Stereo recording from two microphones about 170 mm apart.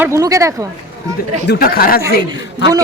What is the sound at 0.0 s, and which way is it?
Speech, 15° right (ahead or behind).